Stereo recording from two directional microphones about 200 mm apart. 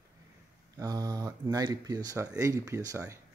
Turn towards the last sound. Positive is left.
turn(degrees=-15)  # may be behind; listen again after turning